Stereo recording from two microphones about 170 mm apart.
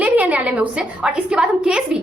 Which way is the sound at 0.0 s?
10° right (ahead or behind).